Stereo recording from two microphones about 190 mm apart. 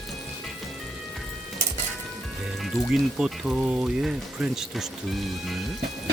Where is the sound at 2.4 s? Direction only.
Centre (ahead or behind).